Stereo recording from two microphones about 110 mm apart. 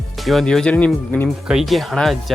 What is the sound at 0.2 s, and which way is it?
Speech, centre (ahead or behind).